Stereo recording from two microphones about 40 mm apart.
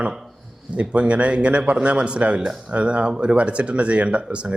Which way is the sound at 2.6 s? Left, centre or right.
Right.